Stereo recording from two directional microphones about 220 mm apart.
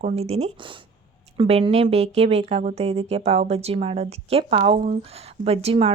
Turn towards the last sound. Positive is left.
turn(degrees=-30)  # may be behind; listen again after turning